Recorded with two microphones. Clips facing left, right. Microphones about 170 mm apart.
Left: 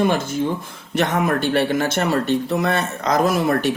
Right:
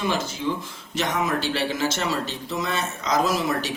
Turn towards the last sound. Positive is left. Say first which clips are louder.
# left 6 dB
turn(degrees=55)  # may be behind; listen again after turning